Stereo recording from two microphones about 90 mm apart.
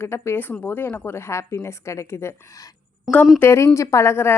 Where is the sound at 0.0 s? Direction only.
30° left (ahead or behind).